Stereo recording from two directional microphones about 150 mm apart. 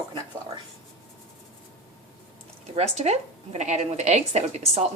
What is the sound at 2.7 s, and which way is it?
A woman's voice, 45° right (ahead or behind).